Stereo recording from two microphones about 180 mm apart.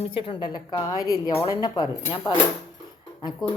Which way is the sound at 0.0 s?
30° left (ahead or behind).